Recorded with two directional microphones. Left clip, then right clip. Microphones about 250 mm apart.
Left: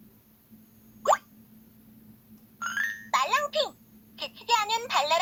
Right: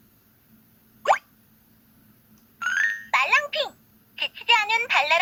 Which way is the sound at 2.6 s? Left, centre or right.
Centre.